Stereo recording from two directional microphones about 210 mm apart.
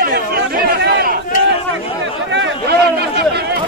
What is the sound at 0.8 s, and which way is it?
Crowd, 50° right (ahead or behind).